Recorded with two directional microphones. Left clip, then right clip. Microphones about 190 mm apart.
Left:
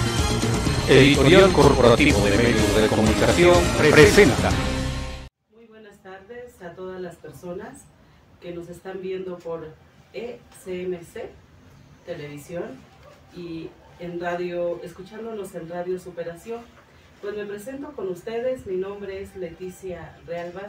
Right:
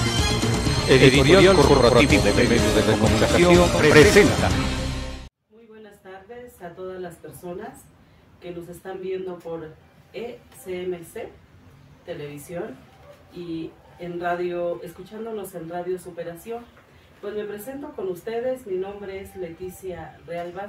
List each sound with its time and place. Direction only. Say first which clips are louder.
0.0 s speech: right 1 dB; centre (ahead or behind)
6.6 s a sound: right 1 dB; 15° right (ahead or behind)
10.1 s speech: even; 15° right (ahead or behind)
12.4 s speech: even; 15° right (ahead or behind)
13.9 s speech: right 2 dB; 15° right (ahead or behind)
17.6 s speech: even; 15° right (ahead or behind)
19.8 s speech: even; 15° right (ahead or behind)